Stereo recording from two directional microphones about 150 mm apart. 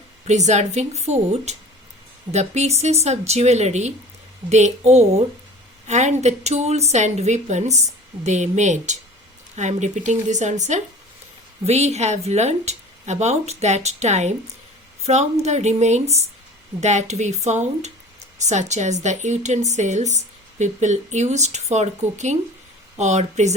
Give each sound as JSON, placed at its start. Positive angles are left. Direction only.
{"t": 0.3, "sound": "a woman's voice", "side_deg": -50}